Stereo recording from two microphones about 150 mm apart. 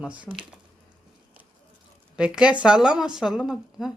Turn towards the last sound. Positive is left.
turn(degrees=-5)  # may be behind; listen again after turning